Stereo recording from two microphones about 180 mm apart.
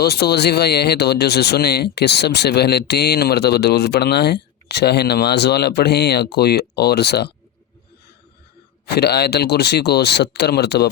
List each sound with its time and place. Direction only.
0.0 s speech: 65° left (ahead or behind)
9.0 s speech: 65° left (ahead or behind)